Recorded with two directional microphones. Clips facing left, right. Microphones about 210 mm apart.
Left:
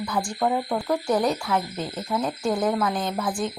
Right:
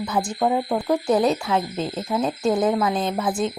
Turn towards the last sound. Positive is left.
turn(degrees=-20)  # may be behind; listen again after turning